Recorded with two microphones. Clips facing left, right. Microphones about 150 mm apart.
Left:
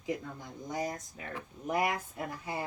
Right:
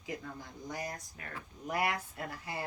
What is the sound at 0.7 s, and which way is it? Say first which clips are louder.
Speech: left 5 dB; 20° left (ahead or behind).